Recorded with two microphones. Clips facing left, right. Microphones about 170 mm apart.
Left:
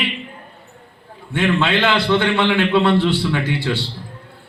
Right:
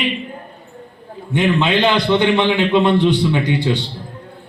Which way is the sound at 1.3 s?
15° right (ahead or behind).